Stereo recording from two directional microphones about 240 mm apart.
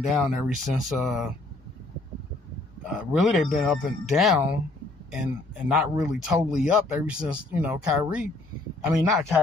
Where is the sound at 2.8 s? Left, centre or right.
Centre.